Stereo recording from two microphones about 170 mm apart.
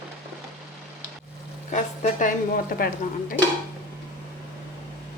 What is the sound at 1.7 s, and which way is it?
A woman's voice, 45° left (ahead or behind).